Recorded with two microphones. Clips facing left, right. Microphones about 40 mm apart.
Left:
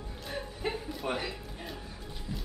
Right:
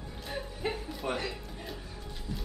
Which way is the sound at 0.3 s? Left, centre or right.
Centre.